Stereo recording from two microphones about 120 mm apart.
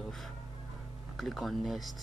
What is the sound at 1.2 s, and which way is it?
Speech, centre (ahead or behind).